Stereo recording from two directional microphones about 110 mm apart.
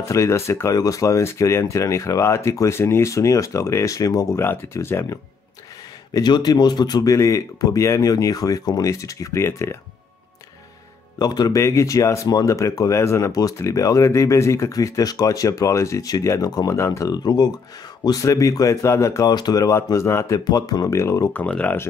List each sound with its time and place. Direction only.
0.0 s speech: 25° left (ahead or behind)
6.1 s speech: 40° left (ahead or behind); by 9.8 s 25° left (ahead or behind)
11.1 s speech: 40° left (ahead or behind)
17.1 s speech: 40° left (ahead or behind)
20.3 s speech: 35° left (ahead or behind)
21.3 s speech: 10° left (ahead or behind)